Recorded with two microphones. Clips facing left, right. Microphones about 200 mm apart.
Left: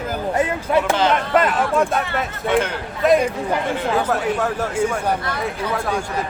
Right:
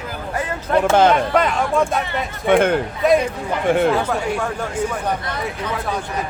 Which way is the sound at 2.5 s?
55° right (ahead or behind).